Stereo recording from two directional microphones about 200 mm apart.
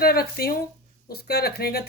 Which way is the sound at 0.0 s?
50° left (ahead or behind).